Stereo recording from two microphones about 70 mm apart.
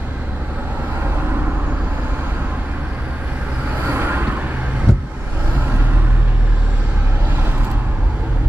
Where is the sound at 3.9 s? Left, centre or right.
Right.